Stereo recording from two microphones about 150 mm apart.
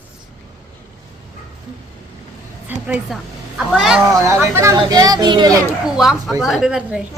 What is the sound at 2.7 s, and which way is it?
A woman's voice, 10° right (ahead or behind).